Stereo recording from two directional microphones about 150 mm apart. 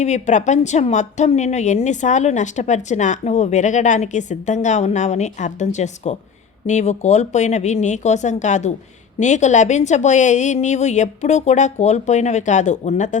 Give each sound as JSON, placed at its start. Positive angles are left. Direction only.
{"t": 0.0, "sound": "a woman's voice", "side_deg": 55}